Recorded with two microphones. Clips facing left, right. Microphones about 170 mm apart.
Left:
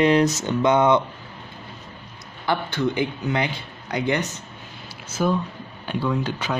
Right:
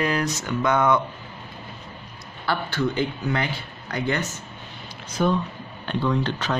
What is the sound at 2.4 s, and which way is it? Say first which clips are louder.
Speech: left 2 dB; 20° left (ahead or behind).